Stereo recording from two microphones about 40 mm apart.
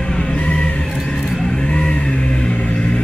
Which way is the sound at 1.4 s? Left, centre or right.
Left.